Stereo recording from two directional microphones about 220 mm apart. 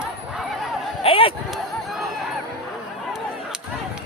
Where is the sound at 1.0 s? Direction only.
25° left (ahead or behind).